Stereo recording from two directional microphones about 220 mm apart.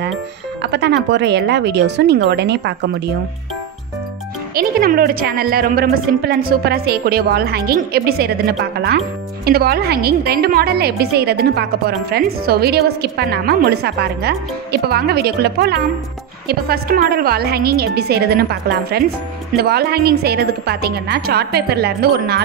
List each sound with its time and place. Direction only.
0.6 s a woman's voice: 50° right (ahead or behind)
4.6 s a woman's voice: 40° right (ahead or behind)